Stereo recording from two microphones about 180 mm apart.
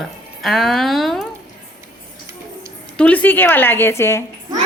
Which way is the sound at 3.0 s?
10° left (ahead or behind).